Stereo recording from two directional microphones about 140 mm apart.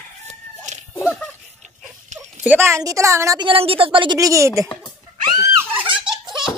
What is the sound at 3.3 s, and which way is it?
A woman's voice, 40° right (ahead or behind).